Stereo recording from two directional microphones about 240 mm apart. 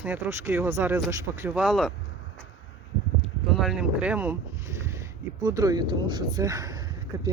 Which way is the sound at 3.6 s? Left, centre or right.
Centre.